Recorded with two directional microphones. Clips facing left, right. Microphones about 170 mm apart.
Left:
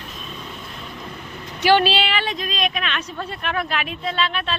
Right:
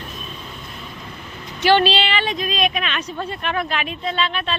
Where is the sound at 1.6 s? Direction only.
10° left (ahead or behind).